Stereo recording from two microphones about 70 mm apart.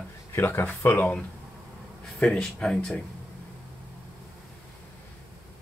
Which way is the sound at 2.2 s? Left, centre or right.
Centre.